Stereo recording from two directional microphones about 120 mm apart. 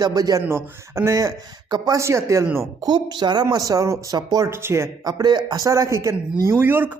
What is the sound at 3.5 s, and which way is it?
A man's voice, 30° right (ahead or behind).